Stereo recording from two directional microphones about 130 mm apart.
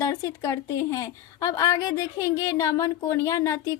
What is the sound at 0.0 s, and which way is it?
A woman's voice, 20° left (ahead or behind).